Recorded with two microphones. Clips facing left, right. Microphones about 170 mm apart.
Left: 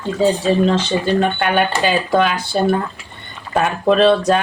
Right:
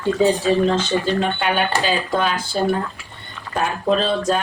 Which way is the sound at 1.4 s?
60° left (ahead or behind).